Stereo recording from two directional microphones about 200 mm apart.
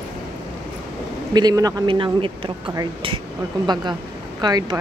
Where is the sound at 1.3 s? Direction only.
20° right (ahead or behind).